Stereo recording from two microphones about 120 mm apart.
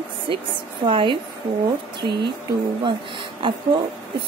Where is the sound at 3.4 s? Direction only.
45° right (ahead or behind).